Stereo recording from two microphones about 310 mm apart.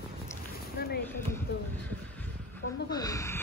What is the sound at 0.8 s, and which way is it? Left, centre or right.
Speech, left.